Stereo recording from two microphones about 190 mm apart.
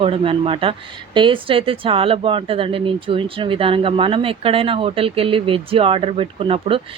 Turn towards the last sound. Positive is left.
turn(degrees=-30)  # may be behind; listen again after turning